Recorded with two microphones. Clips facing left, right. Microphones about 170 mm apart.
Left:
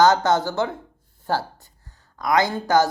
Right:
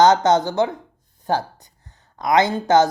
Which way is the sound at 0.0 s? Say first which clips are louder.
Right 3 dB; 20° right (ahead or behind).